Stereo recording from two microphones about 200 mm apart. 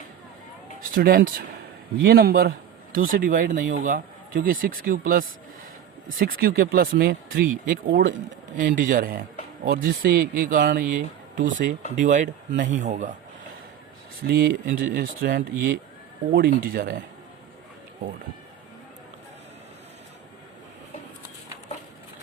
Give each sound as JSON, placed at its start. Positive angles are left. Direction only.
{"t": 0.9, "sound": "speech", "side_deg": -50}
{"t": 8.5, "sound": "speech", "side_deg": -40}
{"t": 14.3, "sound": "speech", "side_deg": -45}